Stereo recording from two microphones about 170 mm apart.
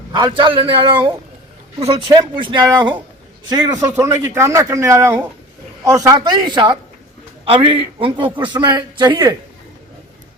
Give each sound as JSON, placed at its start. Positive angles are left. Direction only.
{"t": 0.1, "sound": "a man's voice", "side_deg": -25}